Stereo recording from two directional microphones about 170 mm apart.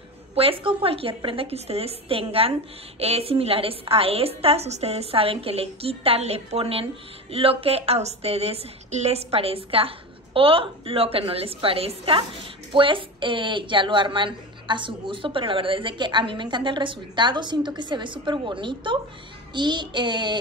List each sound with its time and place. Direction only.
0.3 s a woman's voice: 35° right (ahead or behind)
19.5 s child singing: 25° right (ahead or behind)